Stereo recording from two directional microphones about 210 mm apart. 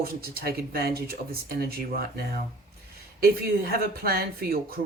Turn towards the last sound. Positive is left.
turn(degrees=-45)  # may be behind; listen again after turning